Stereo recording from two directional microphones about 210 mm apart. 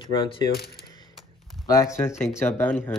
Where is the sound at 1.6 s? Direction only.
15° left (ahead or behind).